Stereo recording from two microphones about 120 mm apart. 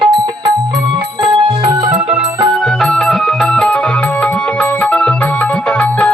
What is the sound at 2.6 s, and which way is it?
Music, 5° left (ahead or behind).